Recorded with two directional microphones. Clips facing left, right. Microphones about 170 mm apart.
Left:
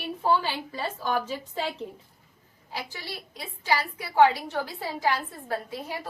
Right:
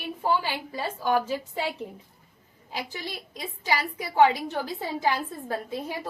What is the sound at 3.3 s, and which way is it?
A woman's voice, 15° right (ahead or behind).